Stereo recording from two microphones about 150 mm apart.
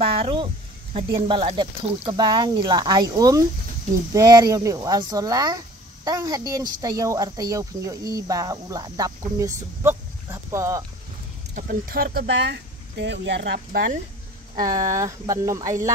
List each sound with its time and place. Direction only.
0.0 s a sound: 40° right (ahead or behind)
1.1 s speech: 35° right (ahead or behind); by 10.9 s 20° right (ahead or behind)
11.5 s speech: 70° right (ahead or behind); by 12.6 s 90° right
13.5 s speech: 80° right
14.6 s speech: 25° right (ahead or behind)